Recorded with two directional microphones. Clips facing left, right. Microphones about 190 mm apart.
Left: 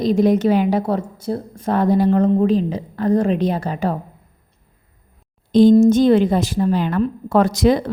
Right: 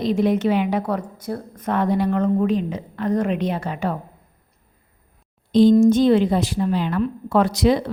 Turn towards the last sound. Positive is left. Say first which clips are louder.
# left 2 dB
turn(degrees=45)  # may be behind; listen again after turning